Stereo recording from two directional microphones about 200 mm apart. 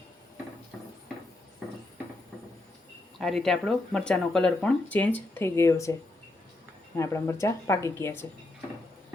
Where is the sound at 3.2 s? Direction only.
Centre (ahead or behind).